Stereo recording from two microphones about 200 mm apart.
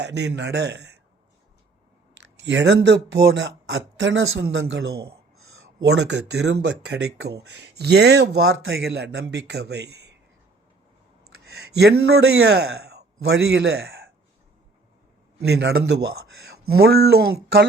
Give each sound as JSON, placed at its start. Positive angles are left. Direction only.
{"t": 0.0, "sound": "speech", "side_deg": -60}
{"t": 2.1, "sound": "speech", "side_deg": -65}
{"t": 11.4, "sound": "a sound", "side_deg": -55}
{"t": 12.4, "sound": "speech", "side_deg": -55}
{"t": 15.4, "sound": "speech", "side_deg": -55}